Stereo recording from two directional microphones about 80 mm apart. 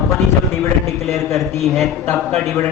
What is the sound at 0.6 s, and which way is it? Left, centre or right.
Speech, left.